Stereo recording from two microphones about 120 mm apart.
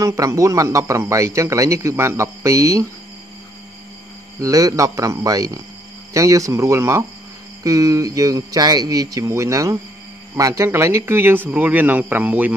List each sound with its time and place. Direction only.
0.0 s speech: 25° right (ahead or behind)
4.4 s speech: 30° right (ahead or behind); by 12.5 s 10° right (ahead or behind)